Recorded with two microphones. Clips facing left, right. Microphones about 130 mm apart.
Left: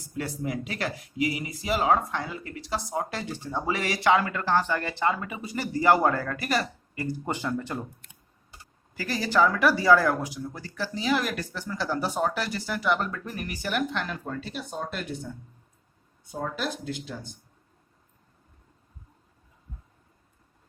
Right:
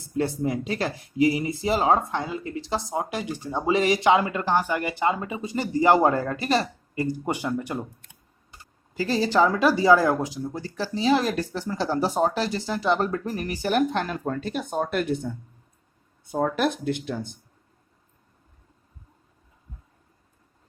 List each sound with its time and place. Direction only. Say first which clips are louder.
0.2 s speech: right 6 dB; 30° right (ahead or behind)
7.3 s speech: right 3 dB; 15° right (ahead or behind)
9.0 s speech: right 3 dB; 25° right (ahead or behind)
13.1 s speech: right 6 dB; 35° right (ahead or behind); by 17.3 s 60° right (ahead or behind)